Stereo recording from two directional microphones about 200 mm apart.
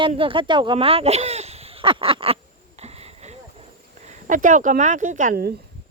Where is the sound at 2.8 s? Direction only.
30° right (ahead or behind).